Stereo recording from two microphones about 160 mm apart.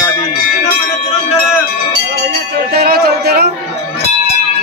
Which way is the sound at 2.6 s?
75° right (ahead or behind).